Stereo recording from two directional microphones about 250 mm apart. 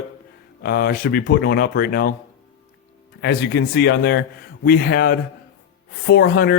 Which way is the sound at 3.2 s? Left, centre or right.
Left.